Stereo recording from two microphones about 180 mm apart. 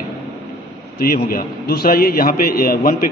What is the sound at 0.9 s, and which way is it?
A man's voice, 55° left (ahead or behind).